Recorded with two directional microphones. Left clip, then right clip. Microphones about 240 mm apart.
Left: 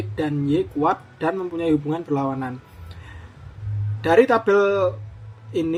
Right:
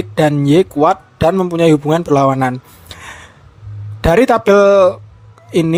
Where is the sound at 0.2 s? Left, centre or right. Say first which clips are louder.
Right 11 dB; right.